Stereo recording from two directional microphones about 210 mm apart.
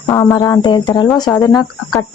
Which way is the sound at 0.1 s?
10° left (ahead or behind).